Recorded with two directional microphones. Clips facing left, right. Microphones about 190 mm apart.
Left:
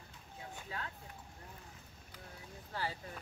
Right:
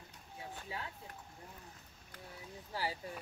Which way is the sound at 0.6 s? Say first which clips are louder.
Left 1 dB; 20° right (ahead or behind).